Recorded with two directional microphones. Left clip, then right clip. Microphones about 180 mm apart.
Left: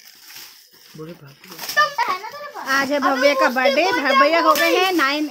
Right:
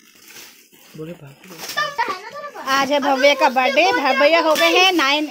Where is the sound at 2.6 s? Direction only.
10° left (ahead or behind).